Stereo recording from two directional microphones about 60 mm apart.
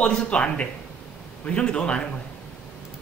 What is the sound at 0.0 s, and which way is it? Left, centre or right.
A man's voice, centre.